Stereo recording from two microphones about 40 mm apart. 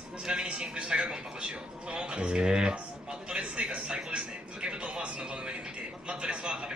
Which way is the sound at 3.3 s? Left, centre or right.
Right.